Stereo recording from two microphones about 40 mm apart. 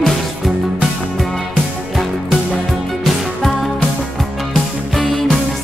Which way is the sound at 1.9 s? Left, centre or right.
Centre.